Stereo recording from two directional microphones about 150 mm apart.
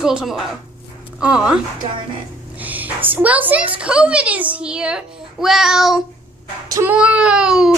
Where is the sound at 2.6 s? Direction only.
10° right (ahead or behind).